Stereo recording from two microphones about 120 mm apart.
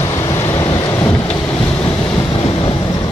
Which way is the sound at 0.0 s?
25° left (ahead or behind).